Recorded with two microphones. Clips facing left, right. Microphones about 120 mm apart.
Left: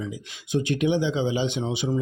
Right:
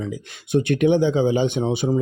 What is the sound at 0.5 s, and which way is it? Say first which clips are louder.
Speech: right 5 dB; 55° right (ahead or behind).